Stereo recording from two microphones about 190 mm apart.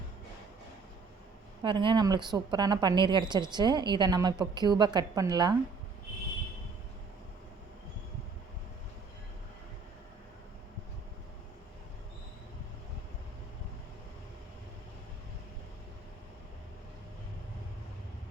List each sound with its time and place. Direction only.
1.6 s a woman's voice: 25° right (ahead or behind)